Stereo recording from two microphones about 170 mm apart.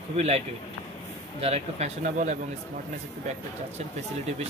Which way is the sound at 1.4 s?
40° right (ahead or behind).